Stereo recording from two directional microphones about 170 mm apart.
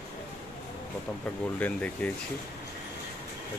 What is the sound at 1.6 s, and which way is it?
Speech, 10° left (ahead or behind).